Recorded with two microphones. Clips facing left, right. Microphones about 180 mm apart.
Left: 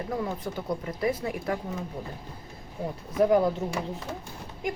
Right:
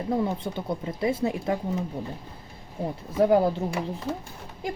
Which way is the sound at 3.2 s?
25° right (ahead or behind).